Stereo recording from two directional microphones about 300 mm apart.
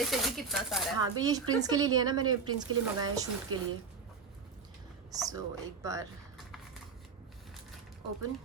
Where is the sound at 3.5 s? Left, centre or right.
Right.